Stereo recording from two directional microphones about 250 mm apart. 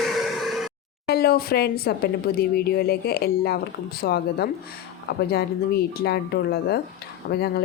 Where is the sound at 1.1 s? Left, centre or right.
Left.